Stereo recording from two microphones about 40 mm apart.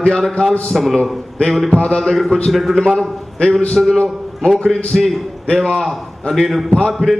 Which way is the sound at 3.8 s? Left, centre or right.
Centre.